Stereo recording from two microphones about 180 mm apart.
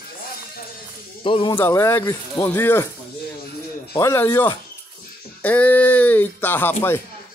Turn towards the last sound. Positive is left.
turn(degrees=10)  # may be behind; listen again after turning